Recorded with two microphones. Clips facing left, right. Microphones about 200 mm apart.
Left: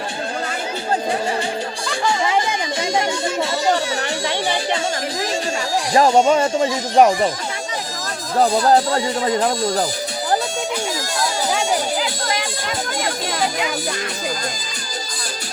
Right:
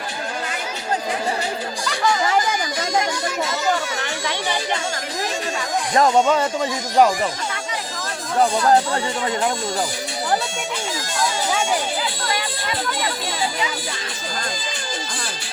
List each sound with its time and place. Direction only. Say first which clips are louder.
1.9 s music: even; 25° left (ahead or behind)
5.9 s speech: left 3 dB; 30° left (ahead or behind)
8.4 s speech: left 2 dB; 35° left (ahead or behind)
11.2 s a sound: even; 40° left (ahead or behind)
12.2 s music: left 2 dB; 45° left (ahead or behind)